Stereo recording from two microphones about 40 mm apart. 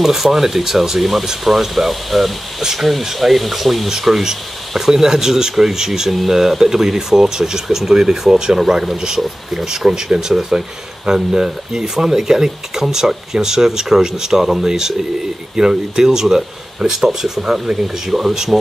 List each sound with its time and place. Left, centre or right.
0.0 s speech: centre
18.0 s speech: centre